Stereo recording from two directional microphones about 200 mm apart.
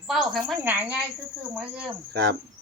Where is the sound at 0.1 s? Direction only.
Centre (ahead or behind).